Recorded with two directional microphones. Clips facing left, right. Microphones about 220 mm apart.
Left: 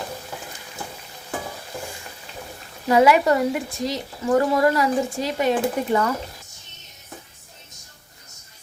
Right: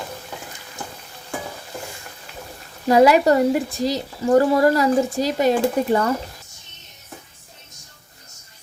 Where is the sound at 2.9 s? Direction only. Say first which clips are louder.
Right 3 dB; 40° right (ahead or behind).